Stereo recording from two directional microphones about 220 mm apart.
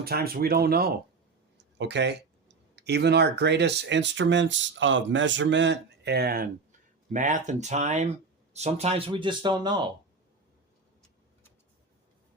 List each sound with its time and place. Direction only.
0.0 s speech: 45° right (ahead or behind); by 9.9 s 20° right (ahead or behind)